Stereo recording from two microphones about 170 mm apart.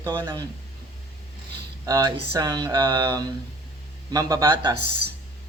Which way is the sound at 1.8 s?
20° right (ahead or behind).